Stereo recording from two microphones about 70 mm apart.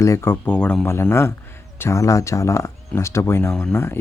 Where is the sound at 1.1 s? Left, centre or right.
Left.